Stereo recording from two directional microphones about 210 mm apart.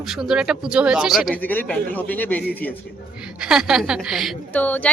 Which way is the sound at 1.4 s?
10° left (ahead or behind).